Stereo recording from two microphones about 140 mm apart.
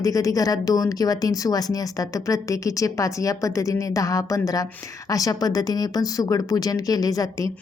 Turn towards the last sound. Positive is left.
turn(degrees=25)  # may be behind; listen again after turning